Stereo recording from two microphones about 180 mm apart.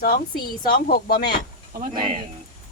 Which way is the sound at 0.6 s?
55° left (ahead or behind).